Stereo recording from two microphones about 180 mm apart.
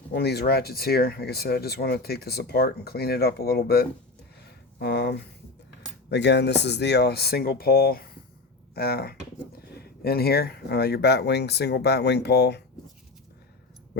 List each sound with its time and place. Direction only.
0.1 s speech: 65° left (ahead or behind)